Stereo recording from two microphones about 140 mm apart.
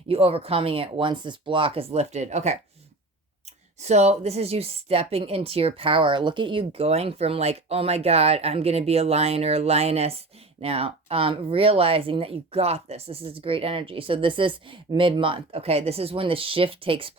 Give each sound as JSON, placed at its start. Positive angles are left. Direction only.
{"t": 0.1, "sound": "a woman's voice", "side_deg": -45}
{"t": 3.8, "sound": "a woman's voice", "side_deg": -50}